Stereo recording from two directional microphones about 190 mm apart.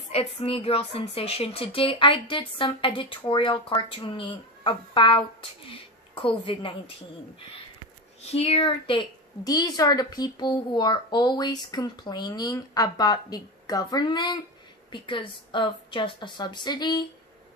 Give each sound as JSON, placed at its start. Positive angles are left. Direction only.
{"t": 0.1, "sound": "a woman's voice", "side_deg": 30}
{"t": 8.2, "sound": "a woman's voice", "side_deg": 30}